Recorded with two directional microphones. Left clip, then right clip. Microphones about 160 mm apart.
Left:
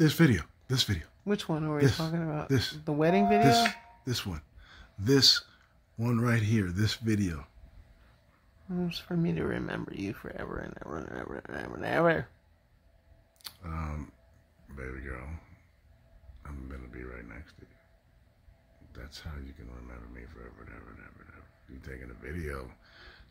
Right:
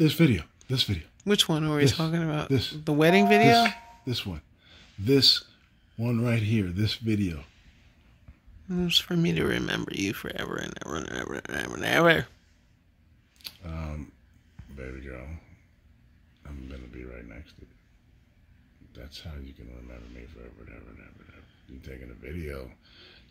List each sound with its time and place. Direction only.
0.0 s speech: 10° left (ahead or behind)
1.2 s speech: 10° right (ahead or behind)
2.5 s speech: 10° left (ahead or behind)
2.8 s speech: 10° right (ahead or behind)
3.7 s a sound: 5° left (ahead or behind)
5.9 s speech: 10° left (ahead or behind)
8.6 s speech: 5° right (ahead or behind)
13.4 s speech: 5° left (ahead or behind)
16.4 s speech: 5° left (ahead or behind)
18.9 s speech: 10° left (ahead or behind)
19.9 s speech: centre (ahead or behind)
22.5 s a sound: 10° left (ahead or behind)